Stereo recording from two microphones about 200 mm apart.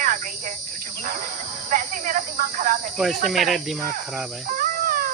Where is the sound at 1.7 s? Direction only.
40° right (ahead or behind).